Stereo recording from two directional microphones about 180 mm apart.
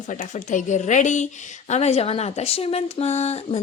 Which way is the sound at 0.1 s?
40° left (ahead or behind).